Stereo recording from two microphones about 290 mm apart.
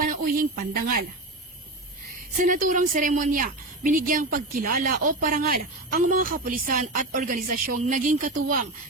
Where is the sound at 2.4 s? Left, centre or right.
Right.